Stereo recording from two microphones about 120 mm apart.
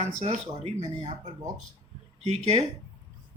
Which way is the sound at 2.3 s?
65° right (ahead or behind).